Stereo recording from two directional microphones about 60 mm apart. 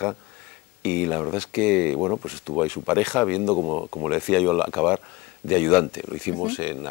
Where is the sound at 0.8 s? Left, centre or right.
Centre.